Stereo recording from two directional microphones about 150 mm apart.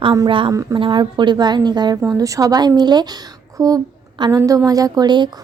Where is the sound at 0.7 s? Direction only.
30° right (ahead or behind).